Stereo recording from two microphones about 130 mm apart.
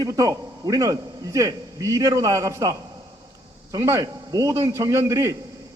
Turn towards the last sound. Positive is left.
turn(degrees=-25)  # may be behind; listen again after turning